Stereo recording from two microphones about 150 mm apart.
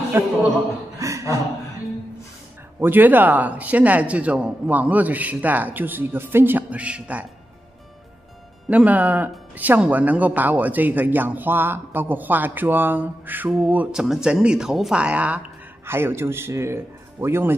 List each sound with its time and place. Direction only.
0.2 s a man's voice: 15° right (ahead or behind)
0.9 s chuckle: 20° right (ahead or behind)
2.8 s a man's voice: 10° right (ahead or behind)
8.6 s a man's voice: 10° right (ahead or behind)